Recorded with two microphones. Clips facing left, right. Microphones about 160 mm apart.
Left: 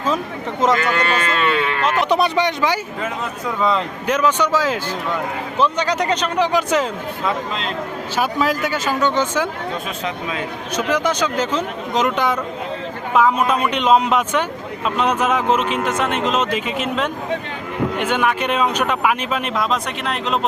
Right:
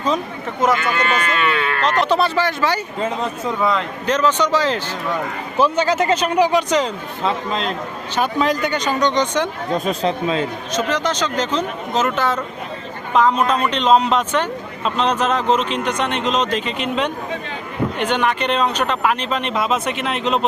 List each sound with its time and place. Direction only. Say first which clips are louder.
1.1 s a sound: left 1 dB; 30° left (ahead or behind)
1.8 s speech: right 1 dB; 10° left (ahead or behind)
3.6 s speech: left 2 dB; centre (ahead or behind)
5.5 s speech: right 3 dB; 5° right (ahead or behind)
6.5 s speech: right 1 dB; 5° left (ahead or behind)
8.1 s speech: right 1 dB; 5° left (ahead or behind)
9.7 s speech: right 6 dB; 35° right (ahead or behind)
10.8 s speech: left 1 dB; 10° left (ahead or behind)